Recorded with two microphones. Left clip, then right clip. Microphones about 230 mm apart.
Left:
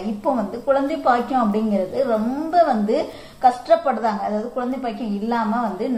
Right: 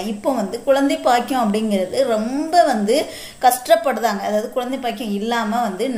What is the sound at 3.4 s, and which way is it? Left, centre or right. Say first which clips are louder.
Speech: right 2 dB; right.